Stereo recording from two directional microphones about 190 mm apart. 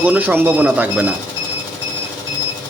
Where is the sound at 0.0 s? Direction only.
10° right (ahead or behind).